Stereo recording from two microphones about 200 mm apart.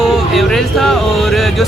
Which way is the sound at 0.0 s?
Centre (ahead or behind).